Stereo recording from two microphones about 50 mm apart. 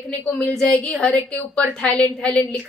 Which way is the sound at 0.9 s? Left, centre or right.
Left.